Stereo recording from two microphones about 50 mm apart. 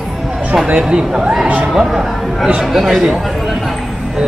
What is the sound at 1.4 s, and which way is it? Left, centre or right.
Speech, right.